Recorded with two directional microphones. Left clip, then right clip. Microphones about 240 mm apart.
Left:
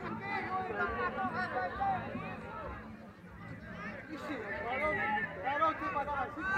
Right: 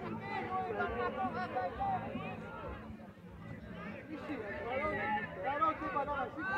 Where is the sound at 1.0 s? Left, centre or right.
Right.